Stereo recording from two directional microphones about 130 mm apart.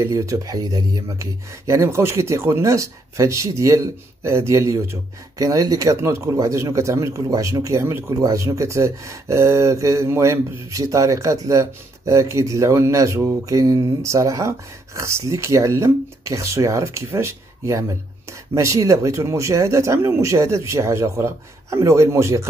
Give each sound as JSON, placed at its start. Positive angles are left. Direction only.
{"t": 0.0, "sound": "speech", "side_deg": -25}